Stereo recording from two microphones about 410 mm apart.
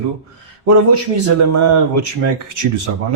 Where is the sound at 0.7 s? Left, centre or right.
Right.